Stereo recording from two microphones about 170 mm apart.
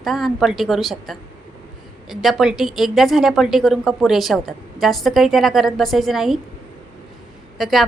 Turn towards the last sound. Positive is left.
turn(degrees=0)  # may be behind; listen again after turning